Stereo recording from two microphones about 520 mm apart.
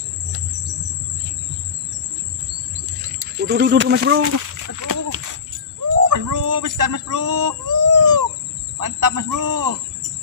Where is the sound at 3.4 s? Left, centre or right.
Centre.